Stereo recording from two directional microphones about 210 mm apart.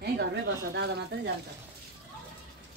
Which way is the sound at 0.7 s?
50° right (ahead or behind).